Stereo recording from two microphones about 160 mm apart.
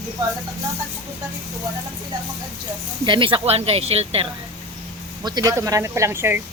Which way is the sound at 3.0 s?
30° right (ahead or behind).